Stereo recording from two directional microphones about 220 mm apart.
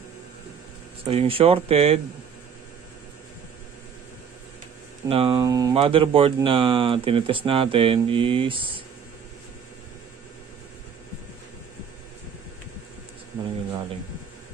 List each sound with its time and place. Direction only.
1.0 s speech: 25° right (ahead or behind)
5.0 s speech: 25° right (ahead or behind)